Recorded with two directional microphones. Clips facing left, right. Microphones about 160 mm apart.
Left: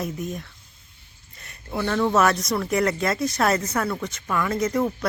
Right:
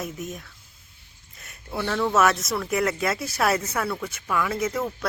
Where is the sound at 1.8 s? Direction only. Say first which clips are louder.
Left 1 dB; centre (ahead or behind).